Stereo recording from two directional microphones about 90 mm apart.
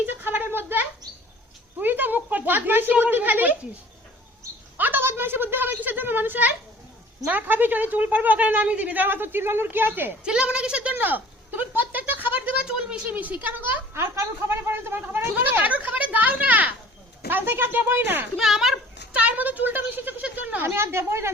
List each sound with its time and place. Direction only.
0.0 s a sound: 20° right (ahead or behind)
1.8 s speech: 20° right (ahead or behind)
4.8 s a woman's voice: 25° right (ahead or behind)
10.2 s a sound: 10° right (ahead or behind)
12.6 s a woman's voice: 10° right (ahead or behind)
18.3 s a woman's voice: 5° right (ahead or behind); by 21.3 s 30° right (ahead or behind)